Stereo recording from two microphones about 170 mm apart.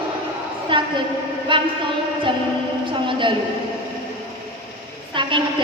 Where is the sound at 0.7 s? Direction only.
30° right (ahead or behind).